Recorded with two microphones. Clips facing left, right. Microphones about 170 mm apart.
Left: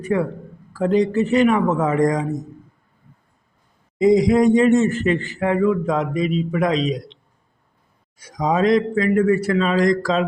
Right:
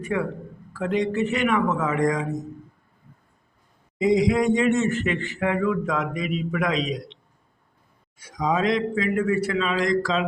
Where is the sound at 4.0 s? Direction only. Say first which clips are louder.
Left 5 dB; 40° left (ahead or behind).